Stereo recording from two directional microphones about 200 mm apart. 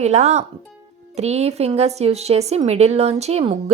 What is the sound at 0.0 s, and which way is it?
A woman's voice, 35° right (ahead or behind).